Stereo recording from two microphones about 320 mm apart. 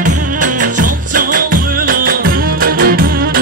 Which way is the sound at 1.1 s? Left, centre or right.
Right.